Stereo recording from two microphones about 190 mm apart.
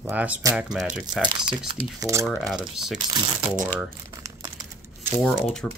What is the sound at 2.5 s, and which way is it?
Speech, centre (ahead or behind).